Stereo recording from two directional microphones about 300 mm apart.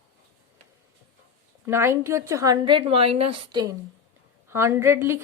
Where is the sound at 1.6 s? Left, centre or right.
Centre.